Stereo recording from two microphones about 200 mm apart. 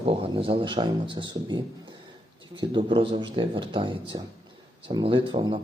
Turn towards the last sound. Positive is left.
turn(degrees=-25)  # may be behind; listen again after turning